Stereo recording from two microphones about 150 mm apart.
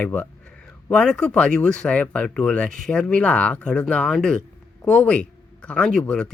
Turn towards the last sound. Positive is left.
turn(degrees=5)  # may be behind; listen again after turning